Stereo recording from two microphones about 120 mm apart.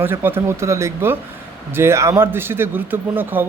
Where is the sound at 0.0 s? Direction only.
20° right (ahead or behind).